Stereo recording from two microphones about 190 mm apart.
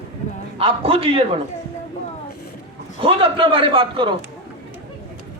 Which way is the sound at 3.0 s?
30° right (ahead or behind).